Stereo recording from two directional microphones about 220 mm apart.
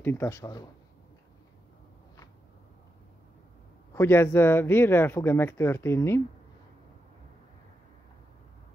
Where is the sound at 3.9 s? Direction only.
10° left (ahead or behind).